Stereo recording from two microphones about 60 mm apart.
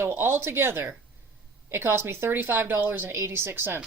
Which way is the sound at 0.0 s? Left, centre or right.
Right.